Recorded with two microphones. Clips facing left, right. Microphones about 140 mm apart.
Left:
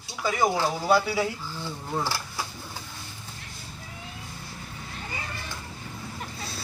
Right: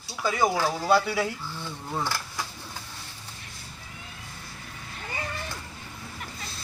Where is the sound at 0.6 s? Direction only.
20° left (ahead or behind).